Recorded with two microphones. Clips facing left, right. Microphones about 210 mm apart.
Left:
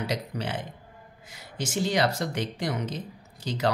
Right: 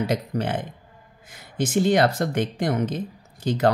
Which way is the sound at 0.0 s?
50° right (ahead or behind).